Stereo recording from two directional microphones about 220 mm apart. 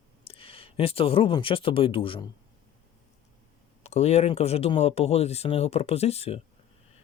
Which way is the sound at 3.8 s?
30° left (ahead or behind).